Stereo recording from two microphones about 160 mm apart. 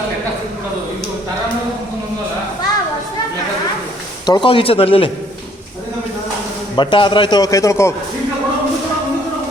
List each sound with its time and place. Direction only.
4.3 s speech: 30° left (ahead or behind)
6.7 s a man's voice: 30° left (ahead or behind)